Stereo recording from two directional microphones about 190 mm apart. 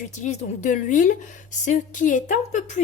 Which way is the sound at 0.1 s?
40° left (ahead or behind).